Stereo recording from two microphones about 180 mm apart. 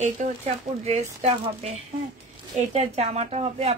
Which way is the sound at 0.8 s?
35° right (ahead or behind).